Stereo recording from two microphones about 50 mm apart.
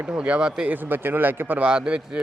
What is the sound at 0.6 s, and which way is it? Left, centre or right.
A man's voice, right.